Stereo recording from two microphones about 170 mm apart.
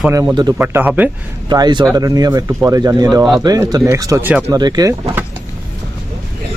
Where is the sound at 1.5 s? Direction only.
25° right (ahead or behind).